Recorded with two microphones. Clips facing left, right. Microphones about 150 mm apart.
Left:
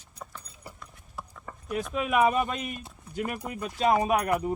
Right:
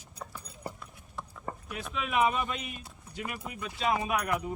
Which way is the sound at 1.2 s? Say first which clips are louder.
Left 1 dB; 5° left (ahead or behind).